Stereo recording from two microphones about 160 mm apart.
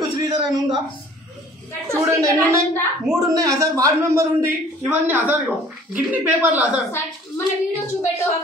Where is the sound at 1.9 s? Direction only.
15° right (ahead or behind).